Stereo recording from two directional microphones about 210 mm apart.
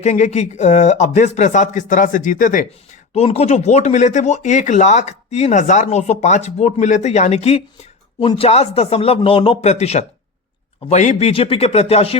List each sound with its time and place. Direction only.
0.0 s a man's voice: 35° left (ahead or behind)